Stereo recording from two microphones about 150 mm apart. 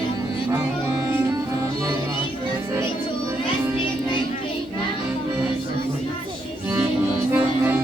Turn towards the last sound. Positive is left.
turn(degrees=-15)  # may be behind; listen again after turning